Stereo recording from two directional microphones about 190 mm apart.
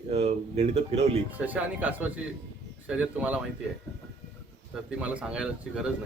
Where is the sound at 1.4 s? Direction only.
10° right (ahead or behind).